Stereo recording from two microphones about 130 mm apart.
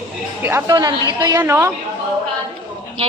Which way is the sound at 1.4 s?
20° right (ahead or behind).